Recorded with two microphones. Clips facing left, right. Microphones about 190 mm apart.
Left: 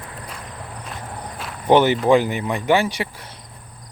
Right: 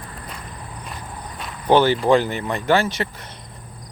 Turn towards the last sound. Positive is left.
turn(degrees=15)  # may be behind; listen again after turning